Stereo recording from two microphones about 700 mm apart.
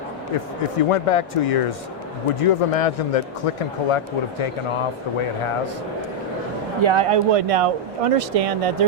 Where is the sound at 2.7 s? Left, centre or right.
Left.